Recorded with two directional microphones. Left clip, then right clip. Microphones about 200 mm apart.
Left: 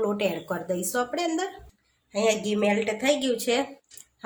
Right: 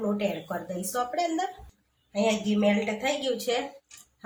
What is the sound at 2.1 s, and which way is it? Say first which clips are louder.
Speech: left 2 dB; 45° left (ahead or behind).